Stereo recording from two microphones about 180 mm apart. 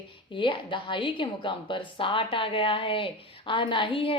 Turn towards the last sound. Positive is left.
turn(degrees=30)  # may be behind; listen again after turning